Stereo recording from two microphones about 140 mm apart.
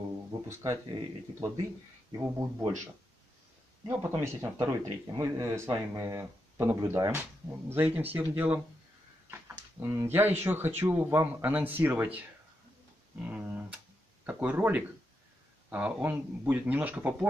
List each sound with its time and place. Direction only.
0.3 s speech: 20° right (ahead or behind)
2.1 s speech: 20° right (ahead or behind)
3.8 s speech: 15° right (ahead or behind)
13.2 s speech: 10° right (ahead or behind)